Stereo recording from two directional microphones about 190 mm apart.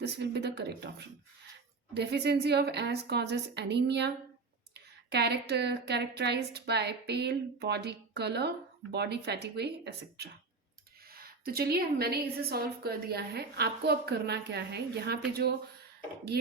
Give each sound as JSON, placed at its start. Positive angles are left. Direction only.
{"t": 0.0, "sound": "a woman's voice", "side_deg": -60}
{"t": 5.1, "sound": "a woman's voice", "side_deg": -60}
{"t": 16.3, "sound": "a woman's voice", "side_deg": -60}